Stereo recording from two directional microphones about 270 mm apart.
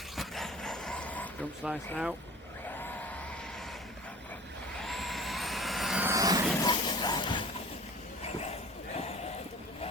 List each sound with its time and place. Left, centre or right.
0.2 s vehicle: centre
4.8 s vehicle: centre
6.6 s a sound: centre